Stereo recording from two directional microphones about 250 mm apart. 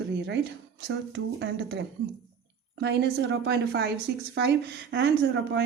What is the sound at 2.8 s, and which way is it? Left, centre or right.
A woman's voice, right.